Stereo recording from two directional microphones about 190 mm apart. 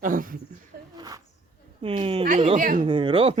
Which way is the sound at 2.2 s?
40° right (ahead or behind).